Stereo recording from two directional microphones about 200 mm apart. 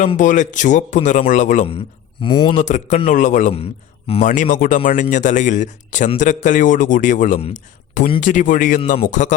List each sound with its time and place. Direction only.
0.0 s speech: 40° left (ahead or behind)
2.2 s speech: 25° left (ahead or behind)
2.6 s speech: 35° left (ahead or behind)
4.3 s speech: 40° left (ahead or behind)